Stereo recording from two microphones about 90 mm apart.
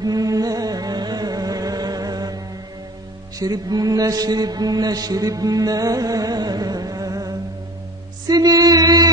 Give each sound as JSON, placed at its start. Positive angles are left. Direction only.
{"t": 0.0, "sound": "music", "side_deg": -45}
{"t": 3.3, "sound": "mantra", "side_deg": -45}
{"t": 8.3, "sound": "music", "side_deg": -45}